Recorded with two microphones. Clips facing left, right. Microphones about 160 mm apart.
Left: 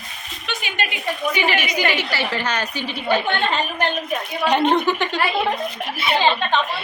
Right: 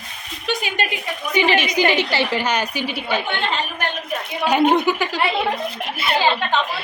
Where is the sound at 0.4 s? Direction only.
40° right (ahead or behind).